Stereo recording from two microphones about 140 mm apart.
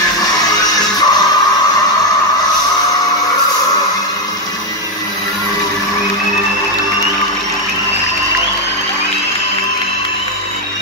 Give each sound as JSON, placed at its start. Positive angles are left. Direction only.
{"t": 0.2, "sound": "music", "side_deg": 25}